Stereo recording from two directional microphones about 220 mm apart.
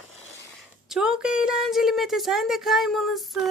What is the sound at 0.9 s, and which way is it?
A woman's voice, 5° right (ahead or behind).